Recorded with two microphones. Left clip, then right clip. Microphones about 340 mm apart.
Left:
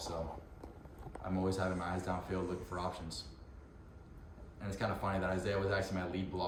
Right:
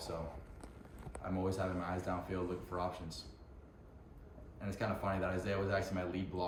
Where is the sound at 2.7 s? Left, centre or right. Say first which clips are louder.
Right 3 dB; centre.